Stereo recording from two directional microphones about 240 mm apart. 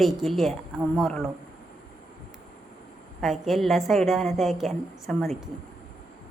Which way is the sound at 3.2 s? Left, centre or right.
Centre.